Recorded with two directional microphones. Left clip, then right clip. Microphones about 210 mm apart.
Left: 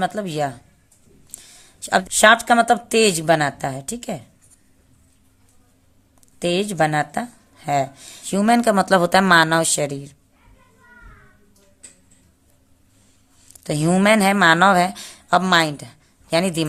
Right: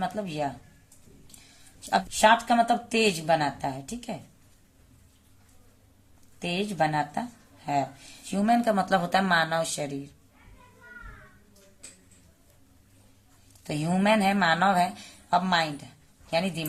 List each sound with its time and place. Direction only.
0.0 s speech: 50° left (ahead or behind)
1.9 s speech: 50° left (ahead or behind)
6.4 s speech: 55° left (ahead or behind)
13.7 s speech: 55° left (ahead or behind)